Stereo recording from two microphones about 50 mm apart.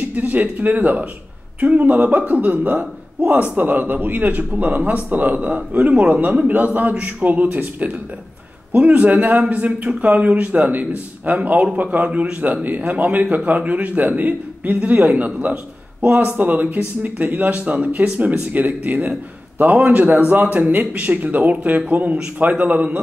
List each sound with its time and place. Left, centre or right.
0.1 s speech: right
8.7 s speech: right